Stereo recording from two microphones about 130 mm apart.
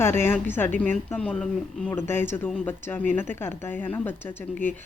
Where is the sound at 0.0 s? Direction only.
20° left (ahead or behind).